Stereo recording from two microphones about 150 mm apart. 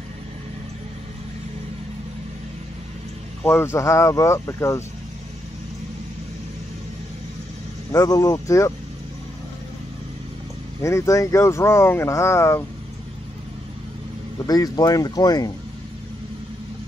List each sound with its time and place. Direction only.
3.4 s speech: 15° left (ahead or behind)
7.9 s speech: 20° left (ahead or behind)
10.8 s speech: 20° left (ahead or behind)
14.4 s speech: 25° left (ahead or behind)